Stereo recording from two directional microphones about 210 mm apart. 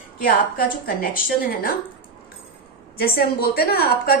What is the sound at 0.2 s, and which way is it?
A woman's voice, 45° left (ahead or behind).